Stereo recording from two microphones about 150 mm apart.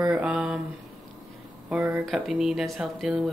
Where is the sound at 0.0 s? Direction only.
5° right (ahead or behind).